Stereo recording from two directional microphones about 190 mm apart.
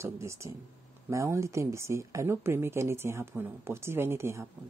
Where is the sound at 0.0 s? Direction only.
15° right (ahead or behind).